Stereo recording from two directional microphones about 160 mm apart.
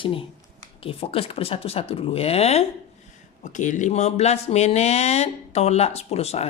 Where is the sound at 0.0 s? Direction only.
35° left (ahead or behind).